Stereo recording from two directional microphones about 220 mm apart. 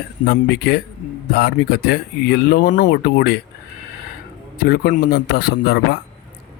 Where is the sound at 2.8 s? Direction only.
45° left (ahead or behind).